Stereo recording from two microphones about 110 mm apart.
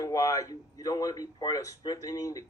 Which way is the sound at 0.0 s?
30° left (ahead or behind).